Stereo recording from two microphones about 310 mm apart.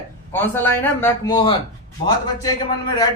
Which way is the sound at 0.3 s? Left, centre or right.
Centre.